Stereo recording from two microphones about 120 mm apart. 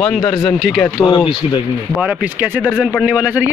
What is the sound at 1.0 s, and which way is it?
Speech, 40° left (ahead or behind).